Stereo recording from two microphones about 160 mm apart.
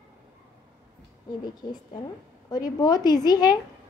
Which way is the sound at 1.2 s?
25° left (ahead or behind).